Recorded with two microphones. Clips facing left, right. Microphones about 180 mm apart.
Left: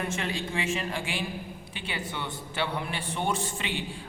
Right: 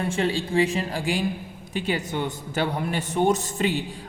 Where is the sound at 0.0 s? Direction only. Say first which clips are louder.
Right 7 dB; 30° right (ahead or behind).